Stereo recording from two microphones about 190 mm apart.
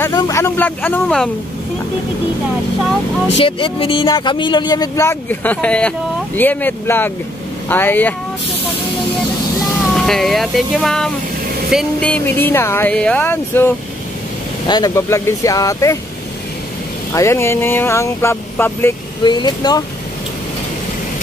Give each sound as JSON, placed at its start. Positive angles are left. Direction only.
{"t": 0.0, "sound": "speech", "side_deg": 15}
{"t": 3.4, "sound": "speech", "side_deg": 30}
{"t": 9.9, "sound": "speech", "side_deg": 0}
{"t": 17.1, "sound": "speech", "side_deg": 15}
{"t": 19.2, "sound": "speech", "side_deg": 20}